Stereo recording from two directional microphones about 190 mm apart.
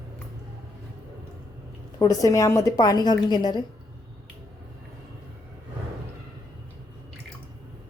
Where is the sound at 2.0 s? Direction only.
20° left (ahead or behind).